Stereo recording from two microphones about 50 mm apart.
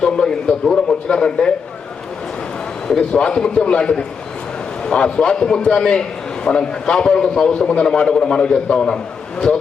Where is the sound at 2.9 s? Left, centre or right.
Centre.